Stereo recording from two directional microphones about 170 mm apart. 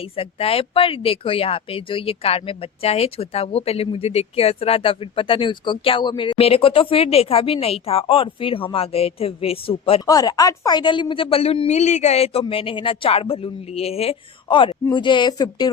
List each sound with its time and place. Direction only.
0.0 s speech: 35° left (ahead or behind)
10.1 s speech: 20° left (ahead or behind)